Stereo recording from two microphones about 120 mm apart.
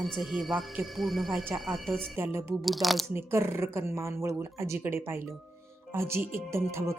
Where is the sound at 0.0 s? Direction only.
Centre (ahead or behind).